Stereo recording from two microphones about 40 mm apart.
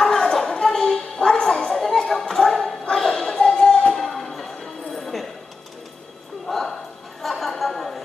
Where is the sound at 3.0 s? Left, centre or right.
Centre.